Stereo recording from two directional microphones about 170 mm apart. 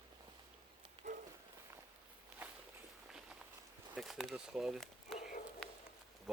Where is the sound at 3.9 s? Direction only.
Centre (ahead or behind).